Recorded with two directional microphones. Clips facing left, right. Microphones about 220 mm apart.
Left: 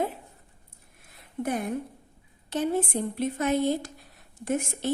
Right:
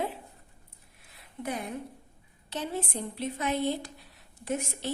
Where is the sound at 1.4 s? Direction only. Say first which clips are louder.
Left 6 dB; 50° left (ahead or behind).